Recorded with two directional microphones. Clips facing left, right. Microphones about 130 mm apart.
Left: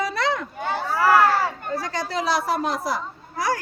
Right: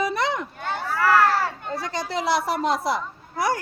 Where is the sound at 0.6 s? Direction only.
10° left (ahead or behind).